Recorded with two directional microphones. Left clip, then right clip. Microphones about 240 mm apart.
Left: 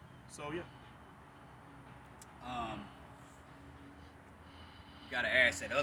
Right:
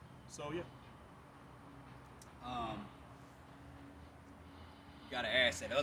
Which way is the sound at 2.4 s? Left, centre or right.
Centre.